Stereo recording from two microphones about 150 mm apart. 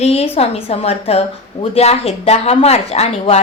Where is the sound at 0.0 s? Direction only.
40° left (ahead or behind).